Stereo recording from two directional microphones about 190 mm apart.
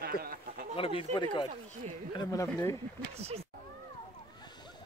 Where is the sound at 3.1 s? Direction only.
35° right (ahead or behind).